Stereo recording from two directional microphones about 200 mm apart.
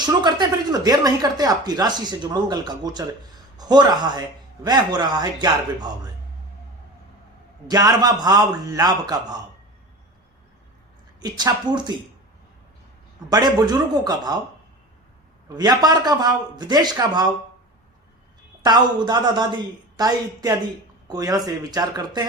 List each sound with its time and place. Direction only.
0.0 s speech: 20° right (ahead or behind)
7.7 s speech: 20° right (ahead or behind)
11.2 s speech: 20° right (ahead or behind)
13.3 s speech: 20° right (ahead or behind)
15.4 s speech: 20° right (ahead or behind)
18.6 s speech: 20° right (ahead or behind)